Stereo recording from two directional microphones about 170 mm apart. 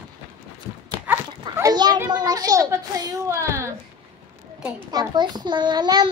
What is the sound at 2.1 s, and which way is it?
A woman's voice, 25° right (ahead or behind).